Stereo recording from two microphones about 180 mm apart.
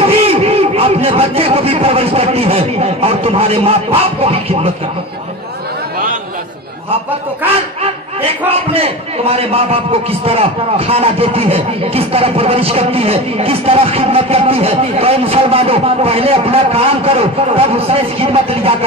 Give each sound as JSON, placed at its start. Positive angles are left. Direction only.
{"t": 0.0, "sound": "a man's voice", "side_deg": -35}
{"t": 8.5, "sound": "a man's voice", "side_deg": -35}